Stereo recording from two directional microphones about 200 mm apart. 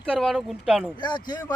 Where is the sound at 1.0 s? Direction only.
20° left (ahead or behind).